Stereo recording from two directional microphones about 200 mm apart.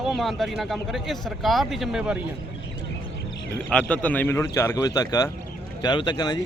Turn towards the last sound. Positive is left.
turn(degrees=20)  # may be behind; listen again after turning